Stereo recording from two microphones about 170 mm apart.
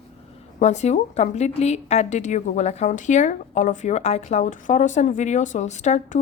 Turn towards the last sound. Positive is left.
turn(degrees=45)  # may be behind; listen again after turning